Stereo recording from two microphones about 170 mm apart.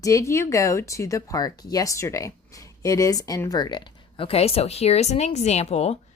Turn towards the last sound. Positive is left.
turn(degrees=40)  # may be behind; listen again after turning